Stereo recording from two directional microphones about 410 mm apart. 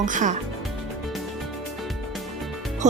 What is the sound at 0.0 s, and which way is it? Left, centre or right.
Speech, centre.